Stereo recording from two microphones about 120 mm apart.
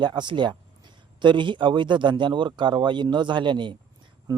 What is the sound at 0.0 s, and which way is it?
Speech, 40° right (ahead or behind).